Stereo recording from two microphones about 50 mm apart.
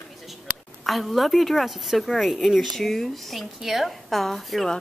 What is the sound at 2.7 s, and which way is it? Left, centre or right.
A woman's voice, centre.